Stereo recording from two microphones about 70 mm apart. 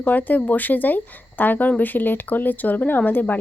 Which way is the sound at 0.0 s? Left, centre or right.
Left.